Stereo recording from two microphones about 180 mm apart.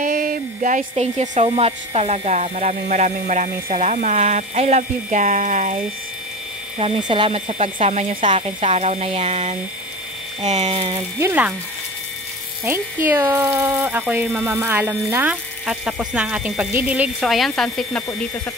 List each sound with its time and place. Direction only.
0.0 s music: 50° right (ahead or behind)
1.5 s speech: 35° right (ahead or behind)
6.8 s speech: 30° right (ahead or behind)
11.0 s speech: 15° right (ahead or behind)
12.6 s speech: 15° right (ahead or behind)